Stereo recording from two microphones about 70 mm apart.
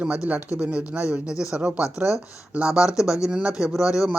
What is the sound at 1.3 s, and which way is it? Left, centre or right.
Speech, left.